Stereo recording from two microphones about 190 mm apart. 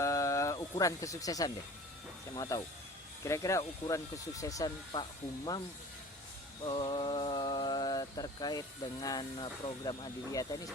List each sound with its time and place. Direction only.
0.0 s a sound: 15° left (ahead or behind)
2.3 s speech: 15° left (ahead or behind)
6.7 s speech: 25° left (ahead or behind)